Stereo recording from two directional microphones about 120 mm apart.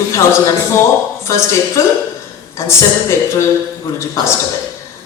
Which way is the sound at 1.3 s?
25° left (ahead or behind).